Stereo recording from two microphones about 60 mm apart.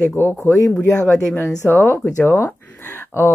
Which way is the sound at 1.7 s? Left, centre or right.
Left.